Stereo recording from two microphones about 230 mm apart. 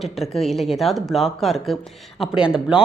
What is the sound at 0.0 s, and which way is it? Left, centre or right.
Speech, centre.